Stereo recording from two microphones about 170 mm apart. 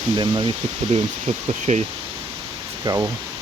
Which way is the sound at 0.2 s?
25° right (ahead or behind).